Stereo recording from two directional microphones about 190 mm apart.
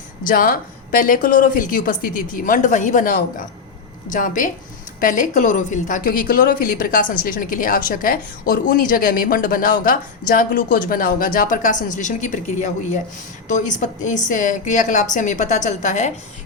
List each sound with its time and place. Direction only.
0.3 s a woman's voice: 50° left (ahead or behind)